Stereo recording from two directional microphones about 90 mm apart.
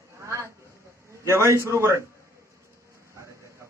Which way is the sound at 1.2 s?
30° right (ahead or behind).